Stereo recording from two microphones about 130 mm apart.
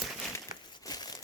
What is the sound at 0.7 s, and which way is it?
Crumpling, 30° left (ahead or behind).